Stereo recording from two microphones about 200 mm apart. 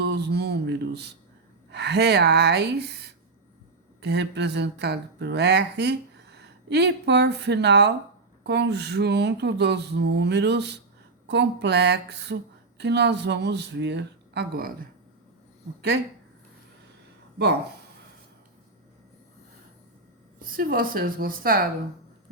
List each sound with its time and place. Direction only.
0.0 s a sound: 55° right (ahead or behind)
1.7 s speech: 55° right (ahead or behind)
20.4 s a woman's voice: 45° right (ahead or behind)